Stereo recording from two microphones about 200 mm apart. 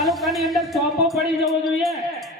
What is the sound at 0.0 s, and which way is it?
Music, centre (ahead or behind).